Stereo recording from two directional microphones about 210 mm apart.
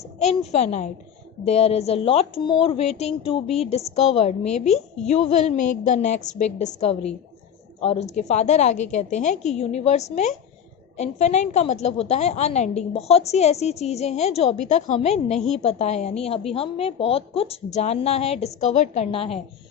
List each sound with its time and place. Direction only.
0.2 s a woman's voice: 30° left (ahead or behind)